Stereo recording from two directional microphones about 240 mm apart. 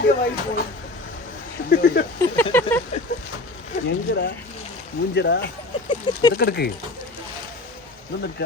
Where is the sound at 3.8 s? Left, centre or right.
Left.